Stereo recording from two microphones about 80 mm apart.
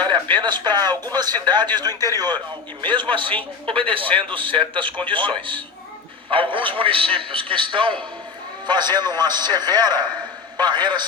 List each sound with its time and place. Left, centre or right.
0.0 s a man's voice: right
2.8 s a man's voice: right
8.6 s a man's voice: right